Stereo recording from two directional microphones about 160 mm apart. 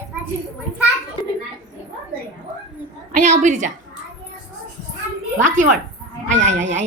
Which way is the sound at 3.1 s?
50° right (ahead or behind).